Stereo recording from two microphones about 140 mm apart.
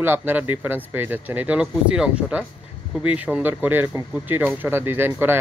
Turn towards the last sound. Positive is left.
turn(degrees=-15)  # may be behind; listen again after turning